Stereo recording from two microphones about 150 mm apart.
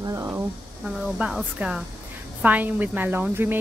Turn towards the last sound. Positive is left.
turn(degrees=-15)  # may be behind; listen again after turning